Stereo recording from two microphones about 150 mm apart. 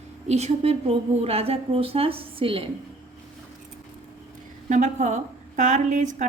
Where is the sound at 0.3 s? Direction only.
45° right (ahead or behind).